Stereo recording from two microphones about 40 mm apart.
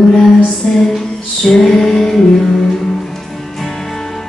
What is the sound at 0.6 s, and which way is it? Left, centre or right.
Music, centre.